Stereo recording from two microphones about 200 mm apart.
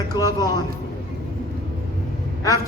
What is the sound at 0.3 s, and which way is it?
Speech, 20° left (ahead or behind).